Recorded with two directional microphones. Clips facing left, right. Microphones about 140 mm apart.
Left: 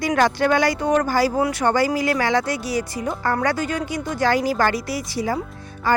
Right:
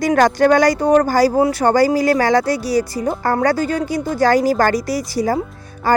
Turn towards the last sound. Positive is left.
turn(degrees=-40)  # may be behind; listen again after turning